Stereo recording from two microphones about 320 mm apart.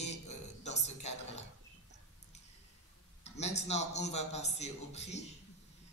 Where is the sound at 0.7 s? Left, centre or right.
Left.